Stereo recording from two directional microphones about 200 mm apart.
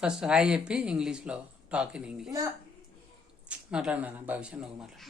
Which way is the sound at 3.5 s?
5° right (ahead or behind).